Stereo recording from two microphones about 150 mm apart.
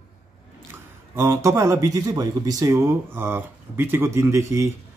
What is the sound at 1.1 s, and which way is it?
Speech, 20° right (ahead or behind).